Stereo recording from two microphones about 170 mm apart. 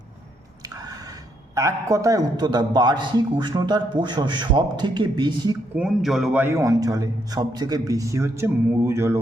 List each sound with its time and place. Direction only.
1.5 s a man's voice: 20° right (ahead or behind)
5.7 s a man's voice: 5° right (ahead or behind)
6.4 s a man's voice: 15° right (ahead or behind)